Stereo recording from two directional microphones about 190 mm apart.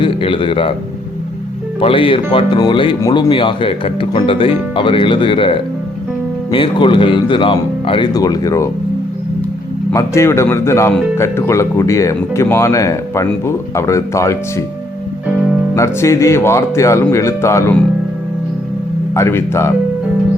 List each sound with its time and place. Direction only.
0.0 s a man's voice: 25° left (ahead or behind)
1.8 s speech: 25° left (ahead or behind)
9.9 s speech: 15° left (ahead or behind)
15.7 s speech: 15° left (ahead or behind)
19.1 s speech: 15° left (ahead or behind)